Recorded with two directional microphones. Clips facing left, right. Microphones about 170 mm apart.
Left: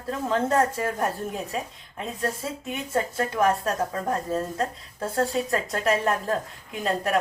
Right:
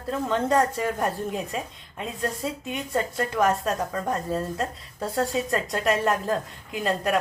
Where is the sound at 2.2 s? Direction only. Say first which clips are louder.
Right 1 dB; centre (ahead or behind).